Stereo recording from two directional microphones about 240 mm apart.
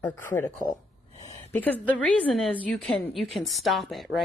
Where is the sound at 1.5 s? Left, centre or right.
Centre.